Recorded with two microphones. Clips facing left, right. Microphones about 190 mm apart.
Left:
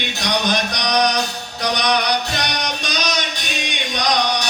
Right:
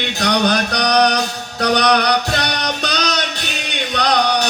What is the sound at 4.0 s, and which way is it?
Music, 60° right (ahead or behind).